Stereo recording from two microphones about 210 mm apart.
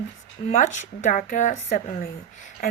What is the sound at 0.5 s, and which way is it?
Speech, 35° left (ahead or behind).